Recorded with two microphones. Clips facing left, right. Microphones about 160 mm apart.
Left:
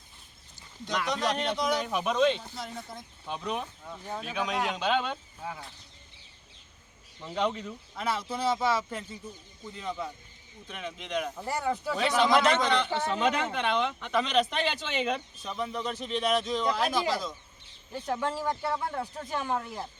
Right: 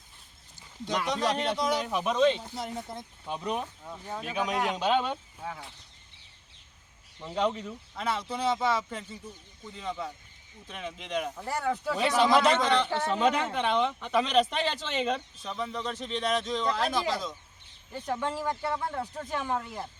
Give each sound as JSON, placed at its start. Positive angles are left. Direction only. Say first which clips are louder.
{"t": 1.1, "sound": "speech", "louder": "right 1 dB", "side_deg": -5}
{"t": 2.4, "sound": "speech", "louder": "right 3 dB", "side_deg": -15}
{"t": 3.2, "sound": "speech", "louder": "right 1 dB", "side_deg": -5}
{"t": 7.3, "sound": "speech", "louder": "right 1 dB", "side_deg": -5}
{"t": 11.3, "sound": "speech", "louder": "even", "side_deg": 10}
{"t": 11.9, "sound": "speech", "louder": "right 1 dB", "side_deg": -5}